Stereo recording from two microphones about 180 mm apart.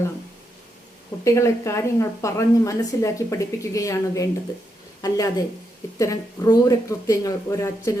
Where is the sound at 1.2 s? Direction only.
15° left (ahead or behind).